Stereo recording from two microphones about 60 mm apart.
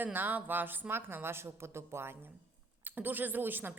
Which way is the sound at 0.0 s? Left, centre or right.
Right.